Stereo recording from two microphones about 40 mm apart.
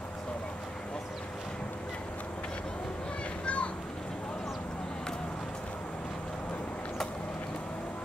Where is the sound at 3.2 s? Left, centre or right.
Left.